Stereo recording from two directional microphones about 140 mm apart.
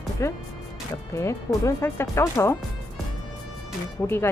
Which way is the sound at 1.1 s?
20° left (ahead or behind).